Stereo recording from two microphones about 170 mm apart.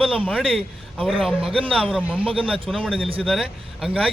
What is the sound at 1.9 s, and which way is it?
Speech, 10° right (ahead or behind).